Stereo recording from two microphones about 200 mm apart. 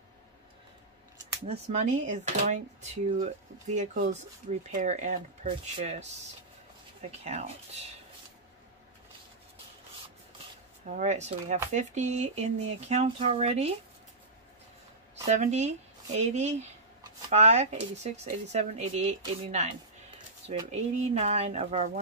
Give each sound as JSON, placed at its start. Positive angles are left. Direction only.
{"t": 1.5, "sound": "speech", "side_deg": -35}
{"t": 10.9, "sound": "speech", "side_deg": -35}
{"t": 15.2, "sound": "speech", "side_deg": -35}
{"t": 21.1, "sound": "speech", "side_deg": -35}